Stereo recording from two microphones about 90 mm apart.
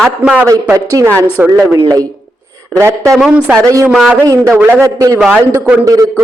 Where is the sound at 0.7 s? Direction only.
35° right (ahead or behind).